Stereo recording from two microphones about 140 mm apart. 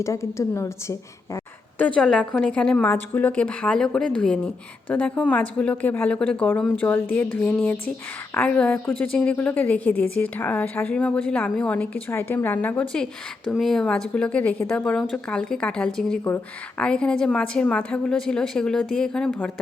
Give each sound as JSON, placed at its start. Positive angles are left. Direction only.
{"t": 0.0, "sound": "a woman's voice", "side_deg": 20}
{"t": 1.8, "sound": "a woman's voice", "side_deg": 5}